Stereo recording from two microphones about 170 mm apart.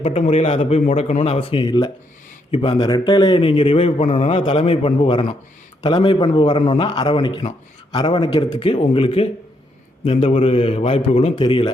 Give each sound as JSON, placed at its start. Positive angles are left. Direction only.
{"t": 0.0, "sound": "a man's voice", "side_deg": 40}